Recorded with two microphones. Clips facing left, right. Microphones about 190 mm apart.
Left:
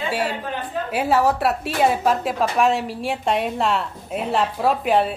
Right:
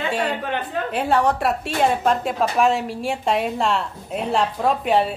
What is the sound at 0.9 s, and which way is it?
A woman's voice, 5° left (ahead or behind).